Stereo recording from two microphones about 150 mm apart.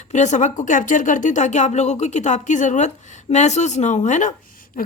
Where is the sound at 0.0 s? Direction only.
50° left (ahead or behind).